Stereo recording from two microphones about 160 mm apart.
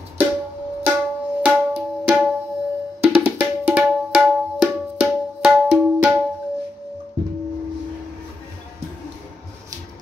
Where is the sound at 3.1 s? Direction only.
5° right (ahead or behind).